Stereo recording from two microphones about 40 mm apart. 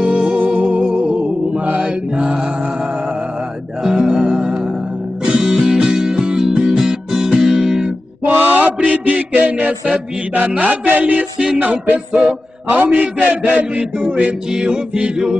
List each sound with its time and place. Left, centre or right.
0.1 s music: right
4.0 s music: right
5.2 s music: right; by 7.9 s centre
8.3 s mantra: right
10.3 s music: right
14.5 s music: right